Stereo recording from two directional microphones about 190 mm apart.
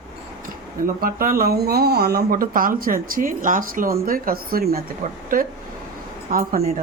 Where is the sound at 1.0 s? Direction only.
50° right (ahead or behind).